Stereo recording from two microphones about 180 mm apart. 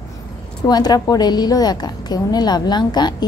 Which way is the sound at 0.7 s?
20° left (ahead or behind).